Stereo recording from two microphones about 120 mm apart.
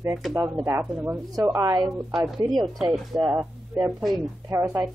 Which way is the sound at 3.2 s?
30° right (ahead or behind).